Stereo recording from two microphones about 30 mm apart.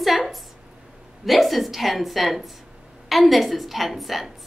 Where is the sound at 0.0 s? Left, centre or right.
Centre.